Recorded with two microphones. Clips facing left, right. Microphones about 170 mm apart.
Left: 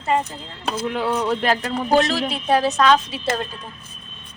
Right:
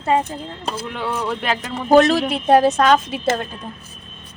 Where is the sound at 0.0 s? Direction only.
50° right (ahead or behind).